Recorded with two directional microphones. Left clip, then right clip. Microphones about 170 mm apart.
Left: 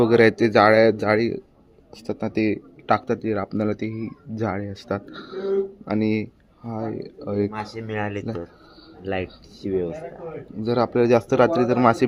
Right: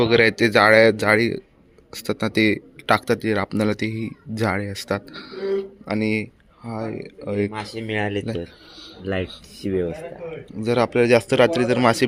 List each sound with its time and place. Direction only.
0.0 s speech: 15° left (ahead or behind)
7.5 s speech: 60° right (ahead or behind)
9.6 s speech: 55° right (ahead or behind)
10.6 s speech: 5° right (ahead or behind)